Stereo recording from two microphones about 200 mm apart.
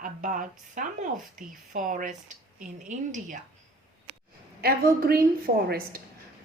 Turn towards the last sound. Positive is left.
turn(degrees=-50)  # may be behind; listen again after turning